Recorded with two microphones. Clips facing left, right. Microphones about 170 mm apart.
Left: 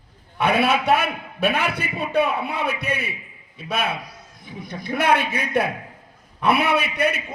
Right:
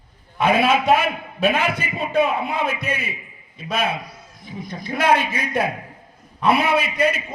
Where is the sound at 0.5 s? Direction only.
65° left (ahead or behind).